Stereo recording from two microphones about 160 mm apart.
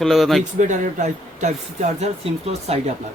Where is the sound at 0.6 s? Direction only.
50° right (ahead or behind).